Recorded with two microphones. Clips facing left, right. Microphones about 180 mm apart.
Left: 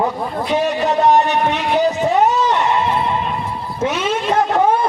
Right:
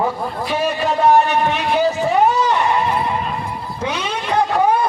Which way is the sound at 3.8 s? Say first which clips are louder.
Left 4 dB; 25° left (ahead or behind).